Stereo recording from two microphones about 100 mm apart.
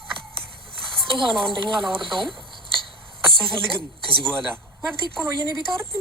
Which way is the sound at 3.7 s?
60° right (ahead or behind).